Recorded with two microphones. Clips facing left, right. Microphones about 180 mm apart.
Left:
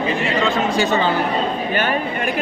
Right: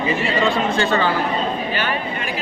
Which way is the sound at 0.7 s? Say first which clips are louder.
Left 1 dB; 15° left (ahead or behind).